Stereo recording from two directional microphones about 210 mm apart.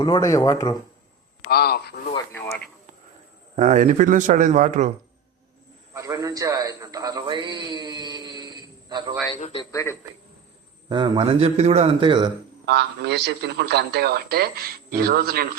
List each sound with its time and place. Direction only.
0.0 s speech: 15° left (ahead or behind)
1.5 s speech: 50° left (ahead or behind)
2.1 s speech: 15° left (ahead or behind)
3.5 s a man's voice: 35° right (ahead or behind)
5.9 s a man's voice: 15° right (ahead or behind)
9.3 s speech: 25° left (ahead or behind)
9.7 s speech: 15° left (ahead or behind)
10.8 s a man's voice: 20° right (ahead or behind)
12.6 s a man's voice: 55° right (ahead or behind)